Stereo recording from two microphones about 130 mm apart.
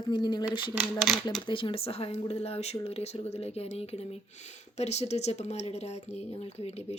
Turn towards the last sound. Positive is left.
turn(degrees=55)  # may be behind; listen again after turning